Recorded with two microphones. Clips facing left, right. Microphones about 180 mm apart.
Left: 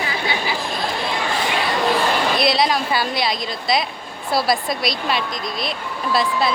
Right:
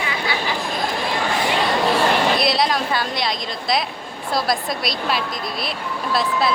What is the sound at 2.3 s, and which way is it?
A woman's voice, centre (ahead or behind).